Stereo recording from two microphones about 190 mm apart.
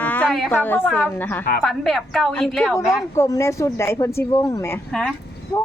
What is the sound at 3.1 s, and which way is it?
A woman's voice, 15° left (ahead or behind).